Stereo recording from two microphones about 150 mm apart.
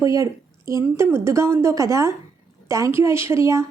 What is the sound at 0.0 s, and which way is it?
A woman's voice, 20° right (ahead or behind).